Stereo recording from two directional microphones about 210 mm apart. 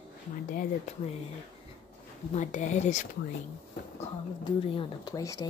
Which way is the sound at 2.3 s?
35° left (ahead or behind).